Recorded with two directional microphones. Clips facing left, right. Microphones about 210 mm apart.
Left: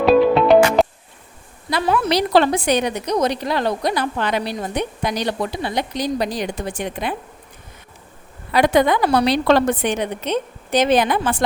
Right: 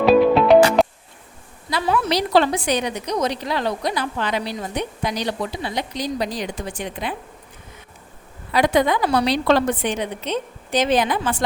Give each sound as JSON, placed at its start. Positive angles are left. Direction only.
{"t": 0.0, "sound": "music", "side_deg": 0}
{"t": 1.7, "sound": "a woman's voice", "side_deg": 60}
{"t": 8.5, "sound": "a woman's voice", "side_deg": 60}